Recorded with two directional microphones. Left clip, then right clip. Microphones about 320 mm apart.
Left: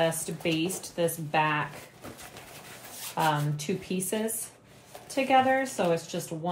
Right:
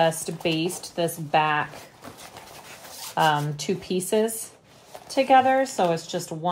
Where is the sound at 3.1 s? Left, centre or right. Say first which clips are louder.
Right 6 dB; right.